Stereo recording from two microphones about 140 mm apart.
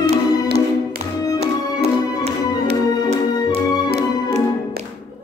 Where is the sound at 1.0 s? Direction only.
50° right (ahead or behind).